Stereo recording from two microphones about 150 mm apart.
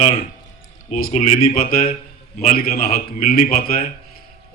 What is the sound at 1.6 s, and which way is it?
Speech, 75° left (ahead or behind).